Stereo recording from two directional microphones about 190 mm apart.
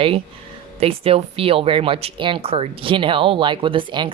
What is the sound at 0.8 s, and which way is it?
Speech, 30° right (ahead or behind).